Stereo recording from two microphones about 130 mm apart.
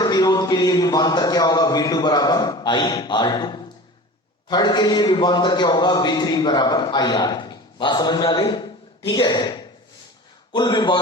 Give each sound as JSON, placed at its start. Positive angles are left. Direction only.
{"t": 0.0, "sound": "a man's voice", "side_deg": 30}